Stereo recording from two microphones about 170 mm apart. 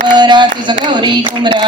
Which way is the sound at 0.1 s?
25° right (ahead or behind).